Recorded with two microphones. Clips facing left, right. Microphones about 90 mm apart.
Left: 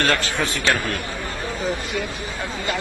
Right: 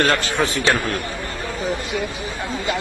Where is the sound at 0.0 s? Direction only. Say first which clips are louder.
Right 3 dB; 20° right (ahead or behind).